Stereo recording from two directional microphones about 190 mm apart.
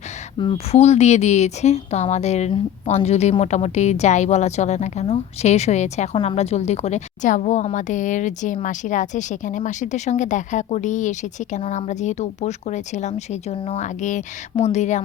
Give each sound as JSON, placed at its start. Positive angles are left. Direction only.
{"t": 0.3, "sound": "a woman's voice", "side_deg": 30}